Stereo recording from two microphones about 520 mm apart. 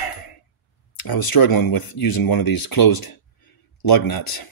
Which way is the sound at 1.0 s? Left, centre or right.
Left.